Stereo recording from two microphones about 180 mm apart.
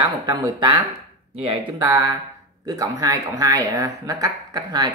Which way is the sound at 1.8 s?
20° right (ahead or behind).